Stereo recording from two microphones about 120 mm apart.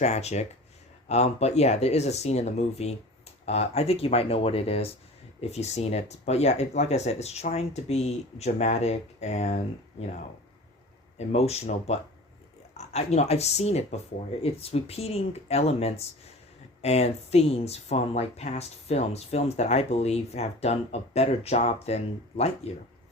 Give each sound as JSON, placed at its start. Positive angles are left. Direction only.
{"t": 0.0, "sound": "speech", "side_deg": 65}
{"t": 5.4, "sound": "speech", "side_deg": 65}
{"t": 11.3, "sound": "speech", "side_deg": 60}